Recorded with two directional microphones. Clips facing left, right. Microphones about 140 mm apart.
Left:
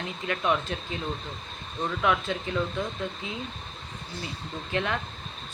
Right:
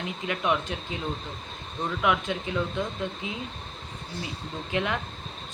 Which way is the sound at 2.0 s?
15° right (ahead or behind).